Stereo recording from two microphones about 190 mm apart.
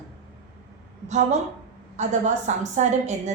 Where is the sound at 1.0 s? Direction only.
40° right (ahead or behind).